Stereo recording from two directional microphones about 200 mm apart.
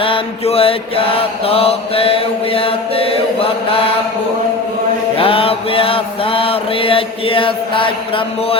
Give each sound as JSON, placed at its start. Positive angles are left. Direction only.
{"t": 0.0, "sound": "mantra", "side_deg": 30}
{"t": 5.1, "sound": "mantra", "side_deg": 25}